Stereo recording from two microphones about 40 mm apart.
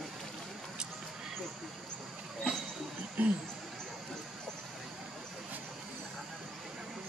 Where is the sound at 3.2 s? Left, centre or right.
Right.